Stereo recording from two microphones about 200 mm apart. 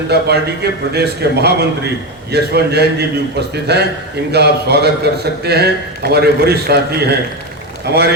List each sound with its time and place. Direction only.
0.1 s a man's voice: 55° right (ahead or behind)